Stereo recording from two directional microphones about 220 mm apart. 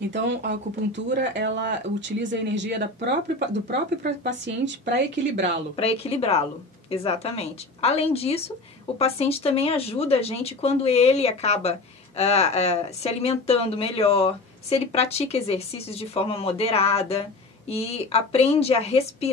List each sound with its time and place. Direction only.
0.1 s speech: 55° right (ahead or behind)
5.8 s speech: 25° left (ahead or behind)